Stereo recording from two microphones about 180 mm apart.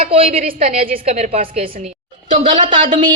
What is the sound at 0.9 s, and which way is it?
Speech, 35° right (ahead or behind).